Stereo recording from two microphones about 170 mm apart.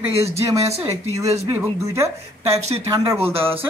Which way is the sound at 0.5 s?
20° right (ahead or behind).